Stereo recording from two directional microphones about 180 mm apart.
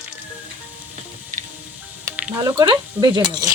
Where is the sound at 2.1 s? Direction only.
10° right (ahead or behind).